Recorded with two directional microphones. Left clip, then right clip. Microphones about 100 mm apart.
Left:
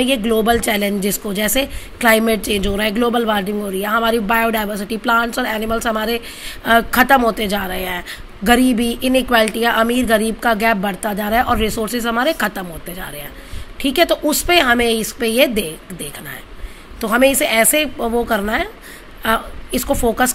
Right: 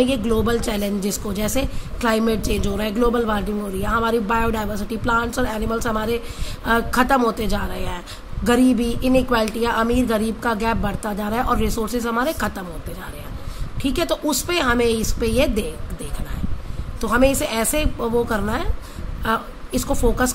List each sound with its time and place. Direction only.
0.0 s a woman's voice: 30° left (ahead or behind)
13.7 s a woman's voice: 30° left (ahead or behind)